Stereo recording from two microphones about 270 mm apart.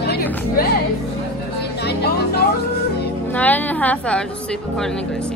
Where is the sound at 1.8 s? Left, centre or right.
Left.